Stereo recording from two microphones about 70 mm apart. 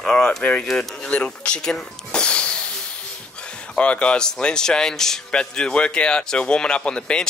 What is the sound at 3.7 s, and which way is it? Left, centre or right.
A man's voice, centre.